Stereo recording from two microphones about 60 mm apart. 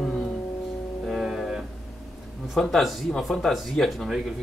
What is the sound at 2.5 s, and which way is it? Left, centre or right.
Speech, centre.